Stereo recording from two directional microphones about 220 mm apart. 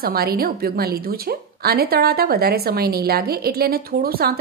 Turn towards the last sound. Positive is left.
turn(degrees=-45)  # may be behind; listen again after turning